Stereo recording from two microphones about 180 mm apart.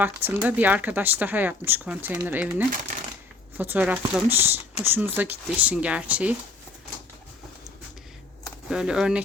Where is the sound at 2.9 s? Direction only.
45° right (ahead or behind).